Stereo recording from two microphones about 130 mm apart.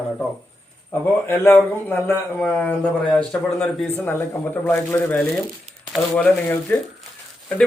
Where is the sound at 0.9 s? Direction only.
15° left (ahead or behind).